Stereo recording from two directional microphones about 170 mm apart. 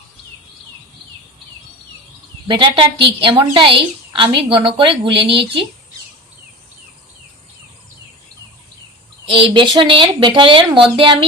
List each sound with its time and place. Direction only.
2.5 s a woman's voice: 30° right (ahead or behind)
9.2 s a woman's voice: 30° right (ahead or behind)